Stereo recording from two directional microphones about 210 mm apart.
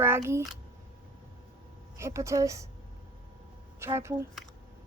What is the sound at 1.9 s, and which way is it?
Speech, 15° right (ahead or behind).